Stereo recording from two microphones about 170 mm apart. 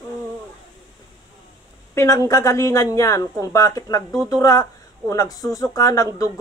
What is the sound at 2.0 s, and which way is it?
Speech, 20° left (ahead or behind).